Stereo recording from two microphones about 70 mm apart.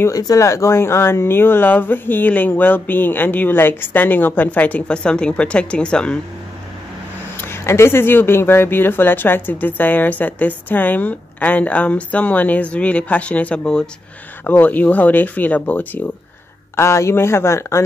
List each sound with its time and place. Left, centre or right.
0.1 s speech: left; by 6.1 s centre
7.3 s speech: left; by 13.8 s centre
14.4 s speech: left
16.7 s speech: left